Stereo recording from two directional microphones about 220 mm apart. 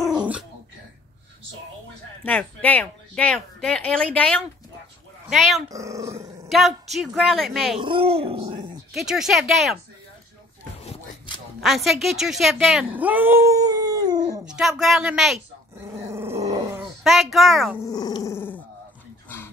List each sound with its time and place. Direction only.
0.2 s dog: 5° right (ahead or behind)
2.2 s speech: 5° left (ahead or behind)
5.7 s speech: 15° right (ahead or behind)
6.5 s speech: centre (ahead or behind)
7.8 s speech: 25° right (ahead or behind)
8.9 s speech: centre (ahead or behind)
10.8 s a sound: 25° left (ahead or behind)
11.6 s speech: centre (ahead or behind); by 14.2 s 15° right (ahead or behind)
14.4 s speech: 5° right (ahead or behind)
16.1 s growling: 10° right (ahead or behind)
16.8 s a child's voice: centre (ahead or behind)
17.8 s speech: 15° left (ahead or behind)
19.2 s dog: 10° left (ahead or behind)